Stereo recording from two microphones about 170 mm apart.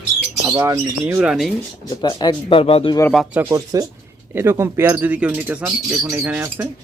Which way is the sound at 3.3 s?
15° right (ahead or behind).